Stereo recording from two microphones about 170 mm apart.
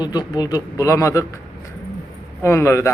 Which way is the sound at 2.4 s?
15° left (ahead or behind).